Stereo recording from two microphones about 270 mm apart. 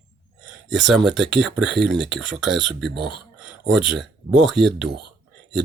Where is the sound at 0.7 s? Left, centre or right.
Centre.